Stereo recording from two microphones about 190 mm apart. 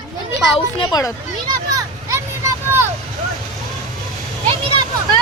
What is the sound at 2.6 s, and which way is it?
Vehicle, 10° right (ahead or behind).